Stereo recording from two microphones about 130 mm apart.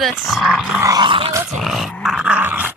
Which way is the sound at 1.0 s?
40° right (ahead or behind).